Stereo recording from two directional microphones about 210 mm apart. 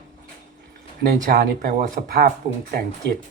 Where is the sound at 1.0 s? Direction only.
40° right (ahead or behind).